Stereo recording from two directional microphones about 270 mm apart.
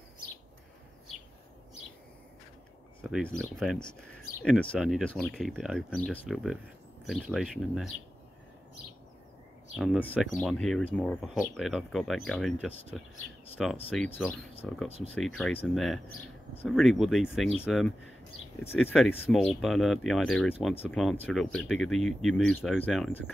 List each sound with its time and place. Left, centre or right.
3.0 s speech: centre
9.8 s speech: centre